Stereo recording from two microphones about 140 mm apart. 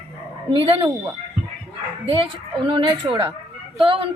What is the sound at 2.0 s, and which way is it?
A woman's voice, 40° right (ahead or behind).